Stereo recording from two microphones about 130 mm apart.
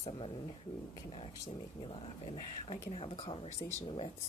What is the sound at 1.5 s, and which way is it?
Speech, 55° left (ahead or behind).